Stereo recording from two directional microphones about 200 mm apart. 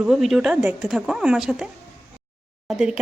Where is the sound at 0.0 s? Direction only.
Centre (ahead or behind).